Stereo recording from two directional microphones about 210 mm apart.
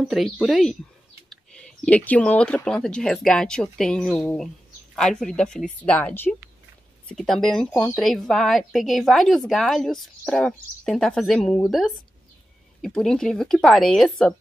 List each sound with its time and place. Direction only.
0.0 s a woman's voice: centre (ahead or behind)
12.8 s a woman's voice: 5° left (ahead or behind)